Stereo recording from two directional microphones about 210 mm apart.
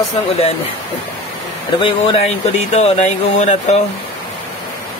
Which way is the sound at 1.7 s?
25° left (ahead or behind).